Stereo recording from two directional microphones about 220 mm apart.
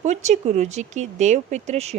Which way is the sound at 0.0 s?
30° right (ahead or behind).